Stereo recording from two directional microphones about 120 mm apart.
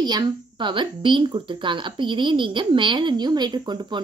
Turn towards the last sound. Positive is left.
turn(degrees=-40)  # may be behind; listen again after turning